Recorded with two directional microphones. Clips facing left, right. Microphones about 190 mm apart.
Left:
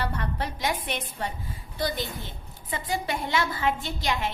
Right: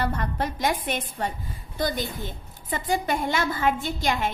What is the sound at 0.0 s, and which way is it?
A woman's voice, 45° right (ahead or behind).